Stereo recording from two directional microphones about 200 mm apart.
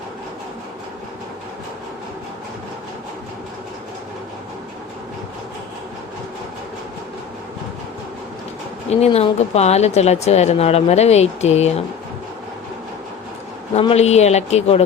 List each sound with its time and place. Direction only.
8.9 s speech: 30° left (ahead or behind)
13.7 s speech: 30° left (ahead or behind)